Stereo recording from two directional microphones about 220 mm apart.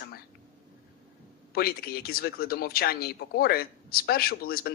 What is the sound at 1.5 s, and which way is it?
Speech, 45° left (ahead or behind).